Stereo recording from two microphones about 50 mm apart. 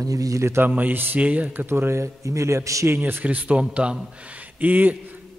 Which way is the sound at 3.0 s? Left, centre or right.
Right.